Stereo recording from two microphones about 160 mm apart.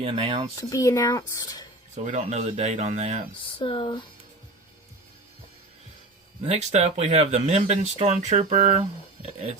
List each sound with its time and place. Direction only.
0.0 s speech: 40° right (ahead or behind)
0.7 s speech: 20° left (ahead or behind)
2.0 s speech: 45° right (ahead or behind)
3.4 s speech: 35° left (ahead or behind)
6.4 s speech: 45° right (ahead or behind)